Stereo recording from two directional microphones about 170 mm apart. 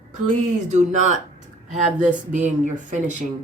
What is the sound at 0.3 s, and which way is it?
Speech, 45° right (ahead or behind).